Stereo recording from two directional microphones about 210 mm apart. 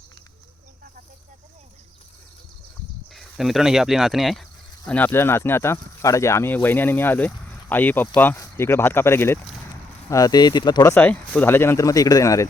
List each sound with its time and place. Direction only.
3.1 s speech: centre (ahead or behind); by 12.5 s 15° left (ahead or behind)